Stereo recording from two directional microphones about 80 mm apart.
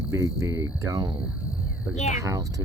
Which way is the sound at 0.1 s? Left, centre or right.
Right.